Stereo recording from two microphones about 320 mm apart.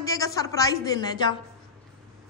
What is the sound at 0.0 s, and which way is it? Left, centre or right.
A man's voice, centre.